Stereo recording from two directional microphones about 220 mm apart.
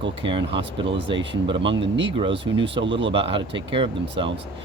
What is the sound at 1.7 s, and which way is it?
Speech, 55° right (ahead or behind).